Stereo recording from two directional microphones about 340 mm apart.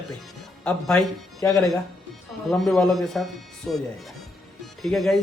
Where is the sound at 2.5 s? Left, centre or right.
Centre.